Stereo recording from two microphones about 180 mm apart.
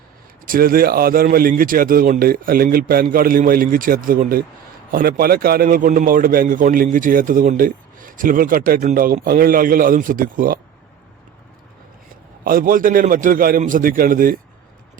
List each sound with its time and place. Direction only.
0.4 s a man's voice: 50° right (ahead or behind)
12.5 s a man's voice: 50° right (ahead or behind)